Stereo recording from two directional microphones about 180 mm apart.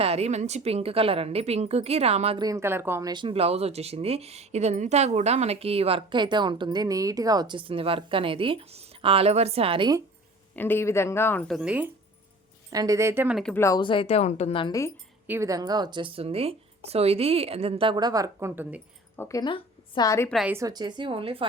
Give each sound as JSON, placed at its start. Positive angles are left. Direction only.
{"t": 0.0, "sound": "speech", "side_deg": -35}
{"t": 2.4, "sound": "speech", "side_deg": -15}
{"t": 10.5, "sound": "speech", "side_deg": 10}
{"t": 12.7, "sound": "speech", "side_deg": -20}
{"t": 13.4, "sound": "speech", "side_deg": 10}
{"t": 15.3, "sound": "speech", "side_deg": -15}
{"t": 19.1, "sound": "speech", "side_deg": 10}
{"t": 19.4, "sound": "a woman's voice", "side_deg": 25}
{"t": 20.3, "sound": "a woman's voice", "side_deg": -5}
{"t": 20.6, "sound": "speech", "side_deg": -20}